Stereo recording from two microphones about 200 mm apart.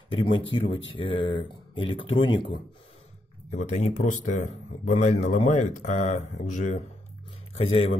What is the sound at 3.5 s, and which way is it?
A man's voice, 35° left (ahead or behind).